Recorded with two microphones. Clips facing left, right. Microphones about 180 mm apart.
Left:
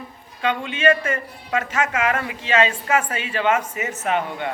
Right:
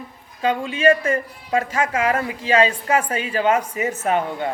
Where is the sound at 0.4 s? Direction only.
35° right (ahead or behind).